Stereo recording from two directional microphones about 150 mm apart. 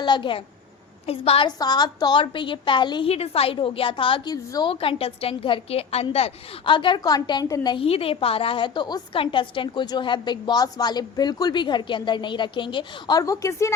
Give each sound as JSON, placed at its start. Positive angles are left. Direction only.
{"t": 0.0, "sound": "a woman's voice", "side_deg": 30}
{"t": 1.5, "sound": "a woman's voice", "side_deg": 25}
{"t": 3.1, "sound": "a woman's voice", "side_deg": 40}